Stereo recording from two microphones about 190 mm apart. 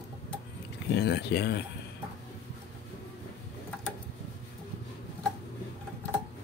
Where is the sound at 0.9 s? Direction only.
60° left (ahead or behind).